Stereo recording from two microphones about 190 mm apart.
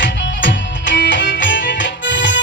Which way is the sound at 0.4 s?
65° left (ahead or behind).